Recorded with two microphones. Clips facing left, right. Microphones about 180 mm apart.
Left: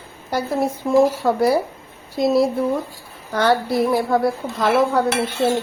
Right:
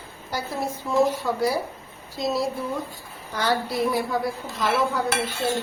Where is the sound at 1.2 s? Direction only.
60° left (ahead or behind).